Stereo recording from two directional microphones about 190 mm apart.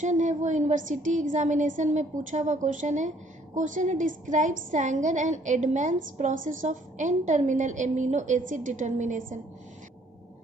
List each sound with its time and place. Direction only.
0.0 s a woman's voice: 40° right (ahead or behind)